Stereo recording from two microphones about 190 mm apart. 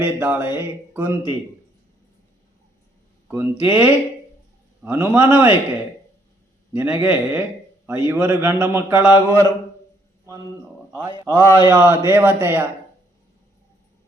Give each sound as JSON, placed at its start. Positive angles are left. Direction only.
{"t": 0.0, "sound": "a man's voice", "side_deg": -10}
{"t": 3.2, "sound": "a man's voice", "side_deg": -10}
{"t": 6.7, "sound": "a man's voice", "side_deg": -10}
{"t": 9.1, "sound": "mantra", "side_deg": 15}
{"t": 11.3, "sound": "mantra", "side_deg": 15}
{"t": 11.8, "sound": "a man's voice", "side_deg": -10}